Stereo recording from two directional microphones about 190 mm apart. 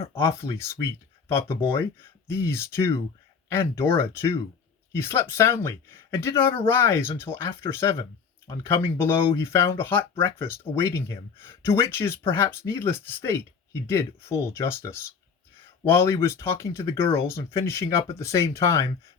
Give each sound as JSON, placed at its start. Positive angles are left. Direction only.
{"t": 0.1, "sound": "speech", "side_deg": 15}